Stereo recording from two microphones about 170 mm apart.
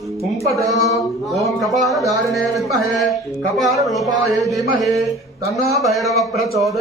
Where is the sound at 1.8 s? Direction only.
20° right (ahead or behind).